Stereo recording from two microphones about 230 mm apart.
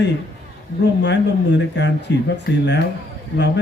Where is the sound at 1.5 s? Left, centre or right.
Left.